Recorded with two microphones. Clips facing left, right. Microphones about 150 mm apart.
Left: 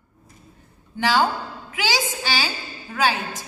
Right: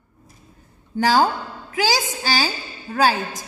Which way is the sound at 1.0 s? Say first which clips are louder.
Right 3 dB; 40° right (ahead or behind).